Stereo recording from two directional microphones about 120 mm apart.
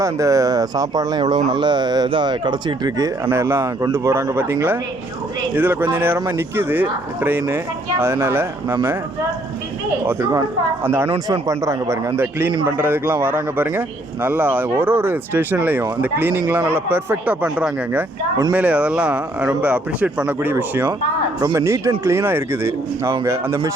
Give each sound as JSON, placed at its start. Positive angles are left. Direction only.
{"t": 0.0, "sound": "speech", "side_deg": -25}
{"t": 3.2, "sound": "speech", "side_deg": -20}
{"t": 10.1, "sound": "speech", "side_deg": -25}